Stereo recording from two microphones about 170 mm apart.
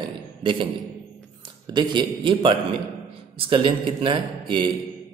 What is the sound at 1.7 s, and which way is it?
Speech, 25° right (ahead or behind).